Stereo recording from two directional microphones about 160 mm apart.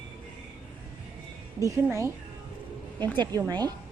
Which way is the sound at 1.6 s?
20° right (ahead or behind).